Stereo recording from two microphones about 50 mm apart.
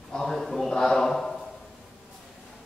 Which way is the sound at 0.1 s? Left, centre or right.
Centre.